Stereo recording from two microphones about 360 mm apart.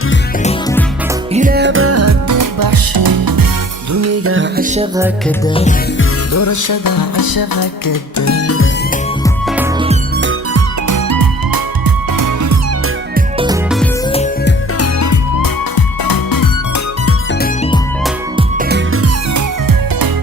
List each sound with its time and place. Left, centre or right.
1.3 s music: right
3.9 s music: right
6.3 s music: left
8.2 s music: left
9.5 s music: centre
10.2 s music: right
10.8 s music: right
13.1 s music: centre
14.8 s music: left
18.3 s music: right
18.9 s music: right